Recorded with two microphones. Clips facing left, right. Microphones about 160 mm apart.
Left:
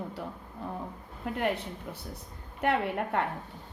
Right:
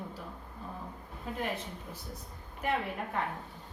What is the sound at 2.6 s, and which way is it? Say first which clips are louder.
Speech: left 5 dB; 70° left (ahead or behind).